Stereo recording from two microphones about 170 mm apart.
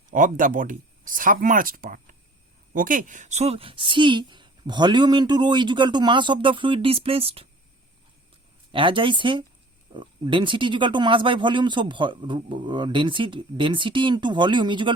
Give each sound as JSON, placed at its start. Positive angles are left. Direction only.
{"t": 0.1, "sound": "speech", "side_deg": -50}
{"t": 8.7, "sound": "speech", "side_deg": -30}